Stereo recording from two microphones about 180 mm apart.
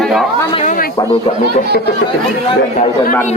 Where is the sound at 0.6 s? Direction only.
50° left (ahead or behind).